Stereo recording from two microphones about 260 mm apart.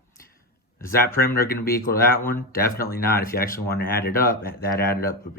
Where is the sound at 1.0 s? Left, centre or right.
Left.